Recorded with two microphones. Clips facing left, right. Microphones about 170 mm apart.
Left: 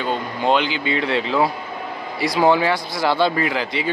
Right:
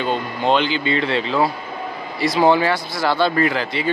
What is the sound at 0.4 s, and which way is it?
Speech, 10° left (ahead or behind).